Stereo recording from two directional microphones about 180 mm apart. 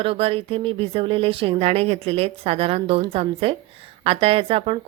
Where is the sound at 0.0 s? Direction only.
30° right (ahead or behind).